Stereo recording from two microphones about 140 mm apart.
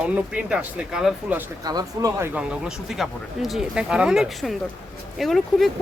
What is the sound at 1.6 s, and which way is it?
Speech, 25° right (ahead or behind).